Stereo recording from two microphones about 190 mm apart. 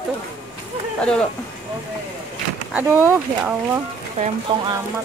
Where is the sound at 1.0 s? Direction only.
5° left (ahead or behind).